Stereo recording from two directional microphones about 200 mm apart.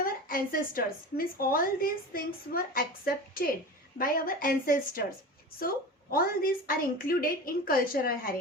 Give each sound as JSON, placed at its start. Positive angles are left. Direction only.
{"t": 0.0, "sound": "a woman's voice", "side_deg": 45}